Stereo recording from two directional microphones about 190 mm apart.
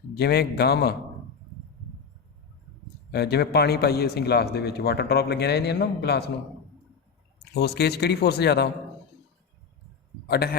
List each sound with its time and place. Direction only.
0.1 s a man's voice: 60° left (ahead or behind)
3.1 s a man's voice: 60° left (ahead or behind)
7.5 s a man's voice: 60° left (ahead or behind)
10.2 s a man's voice: 55° left (ahead or behind)